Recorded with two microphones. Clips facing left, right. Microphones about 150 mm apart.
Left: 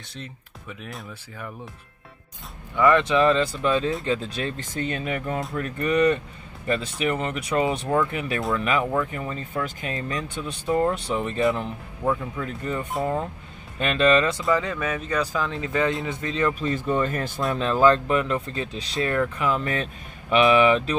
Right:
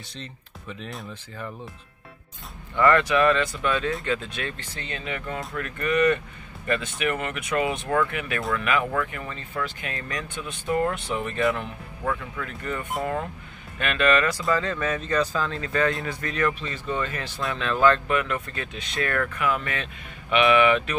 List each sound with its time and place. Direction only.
0.1 s speech: 10° left (ahead or behind)
2.7 s speech: 15° left (ahead or behind)
3.0 s speech: 25° left (ahead or behind); by 5.2 s 50° left (ahead or behind)
5.6 s speech: 35° left (ahead or behind)
14.5 s speech: 10° left (ahead or behind)
16.5 s speech: 45° left (ahead or behind)
17.6 s speech: 35° left (ahead or behind)